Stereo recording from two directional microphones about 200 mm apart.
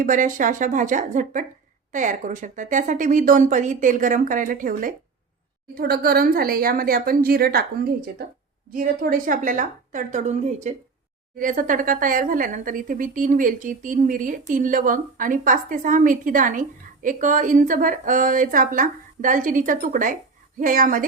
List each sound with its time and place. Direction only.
0.0 s a woman's voice: 40° right (ahead or behind)
8.7 s a woman's voice: 45° right (ahead or behind)